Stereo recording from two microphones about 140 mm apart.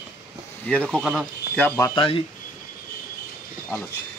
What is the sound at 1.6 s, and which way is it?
Speech, 15° left (ahead or behind).